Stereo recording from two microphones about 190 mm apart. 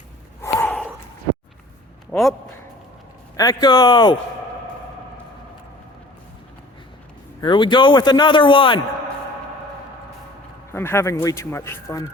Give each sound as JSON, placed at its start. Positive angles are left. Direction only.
{"t": 0.4, "sound": "a sound", "side_deg": 10}
{"t": 2.0, "sound": "a man's voice", "side_deg": 0}
{"t": 3.3, "sound": "speech", "side_deg": 20}
{"t": 7.4, "sound": "speech", "side_deg": 25}
{"t": 10.7, "sound": "speech", "side_deg": 15}